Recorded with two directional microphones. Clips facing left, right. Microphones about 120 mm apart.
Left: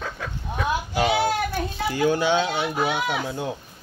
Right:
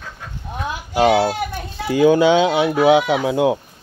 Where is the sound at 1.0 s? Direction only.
65° right (ahead or behind).